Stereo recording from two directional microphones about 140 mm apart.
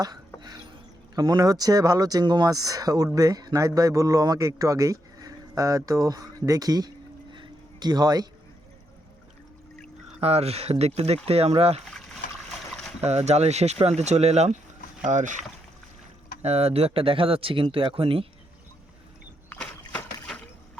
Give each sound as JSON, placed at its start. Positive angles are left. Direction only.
{"t": 1.1, "sound": "a man's voice", "side_deg": -30}
{"t": 7.3, "sound": "a sound", "side_deg": -30}
{"t": 10.2, "sound": "speech", "side_deg": -45}
{"t": 13.0, "sound": "speech", "side_deg": -50}
{"t": 16.4, "sound": "speech", "side_deg": -50}
{"t": 19.5, "sound": "rowboat", "side_deg": 10}